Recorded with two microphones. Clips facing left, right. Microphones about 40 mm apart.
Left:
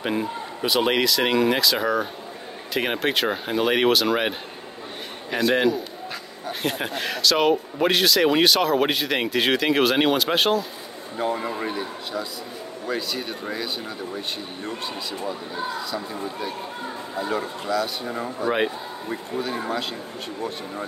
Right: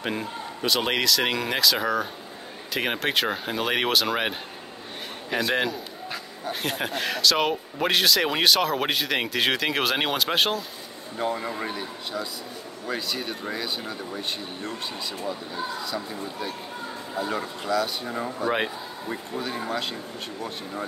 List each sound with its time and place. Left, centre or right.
0.0 s a man's voice: centre